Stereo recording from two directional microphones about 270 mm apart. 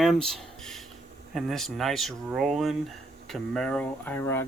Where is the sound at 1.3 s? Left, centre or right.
Centre.